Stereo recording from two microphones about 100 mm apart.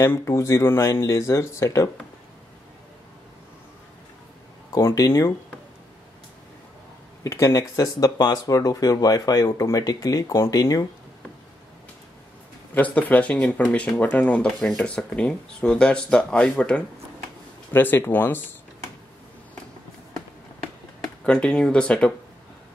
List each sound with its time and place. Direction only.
0.0 s speech: 25° left (ahead or behind)
4.7 s speech: 35° left (ahead or behind)
7.2 s speech: 30° left (ahead or behind)
12.7 s speech: 15° left (ahead or behind)
21.3 s speech: 10° left (ahead or behind)